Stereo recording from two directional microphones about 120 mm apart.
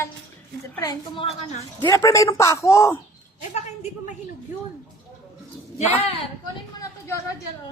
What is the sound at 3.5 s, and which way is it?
Speech, 65° left (ahead or behind).